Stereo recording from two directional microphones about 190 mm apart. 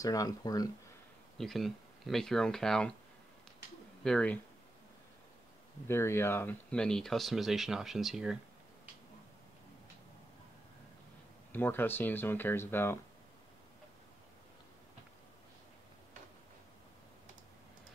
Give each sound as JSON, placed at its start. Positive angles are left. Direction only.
{"t": 0.0, "sound": "speech", "side_deg": 20}
{"t": 1.4, "sound": "speech", "side_deg": 0}
{"t": 4.0, "sound": "speech", "side_deg": 5}
{"t": 5.9, "sound": "speech", "side_deg": 15}
{"t": 11.5, "sound": "speech", "side_deg": 10}